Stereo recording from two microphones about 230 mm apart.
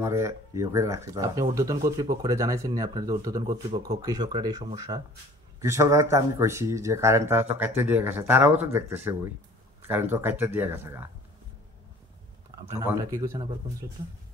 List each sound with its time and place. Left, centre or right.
0.0 s speech: centre
12.7 s speech: centre